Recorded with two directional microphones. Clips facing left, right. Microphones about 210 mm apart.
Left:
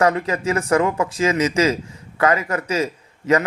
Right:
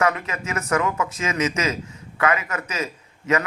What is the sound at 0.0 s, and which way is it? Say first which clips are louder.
A man's voice: left 5 dB; 35° left (ahead or behind).